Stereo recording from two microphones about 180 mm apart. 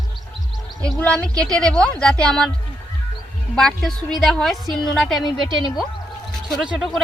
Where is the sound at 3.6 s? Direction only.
Centre (ahead or behind).